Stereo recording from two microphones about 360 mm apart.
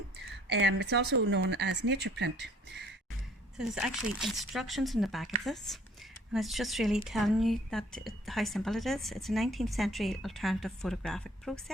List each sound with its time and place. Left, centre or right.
0.4 s speech: right
3.6 s a woman's voice: centre